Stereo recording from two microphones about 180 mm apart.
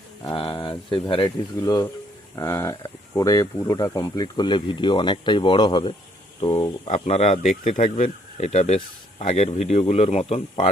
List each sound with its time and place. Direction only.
0.3 s speech: 25° left (ahead or behind)
6.8 s speech: 35° left (ahead or behind)